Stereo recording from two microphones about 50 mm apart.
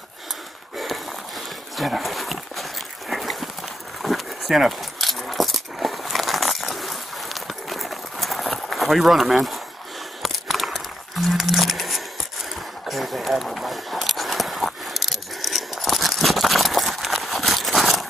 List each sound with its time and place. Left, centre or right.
1.8 s dog: centre
3.1 s horse: centre
4.0 s keys jangling: centre
8.7 s speech: centre
10.2 s a sound: centre